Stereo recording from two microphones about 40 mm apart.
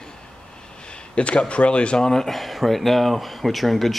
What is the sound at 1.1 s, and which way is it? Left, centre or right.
Speech, left.